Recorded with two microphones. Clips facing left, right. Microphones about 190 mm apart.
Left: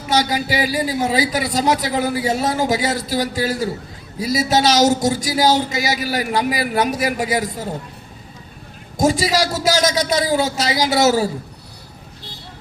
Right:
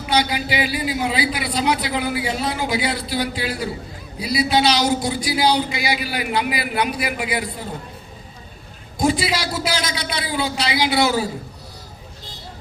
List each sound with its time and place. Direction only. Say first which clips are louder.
0.0 s a woman's voice: left 2 dB; 45° left (ahead or behind)
9.0 s a woman's voice: left 3 dB; 45° left (ahead or behind)